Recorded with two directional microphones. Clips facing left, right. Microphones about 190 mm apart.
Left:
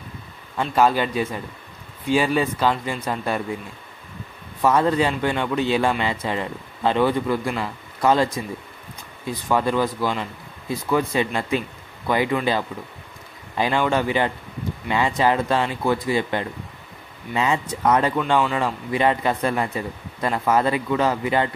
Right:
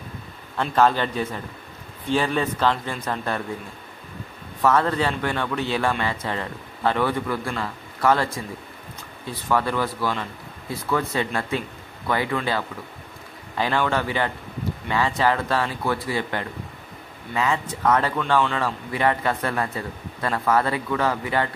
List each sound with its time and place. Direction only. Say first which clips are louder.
0.6 s speech: left 1 dB; 10° left (ahead or behind)
4.6 s speech: left 2 dB; 15° left (ahead or behind)
9.3 s speech: left 2 dB; 15° left (ahead or behind)